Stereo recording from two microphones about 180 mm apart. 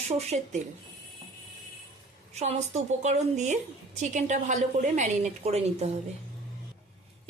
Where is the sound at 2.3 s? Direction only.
40° right (ahead or behind).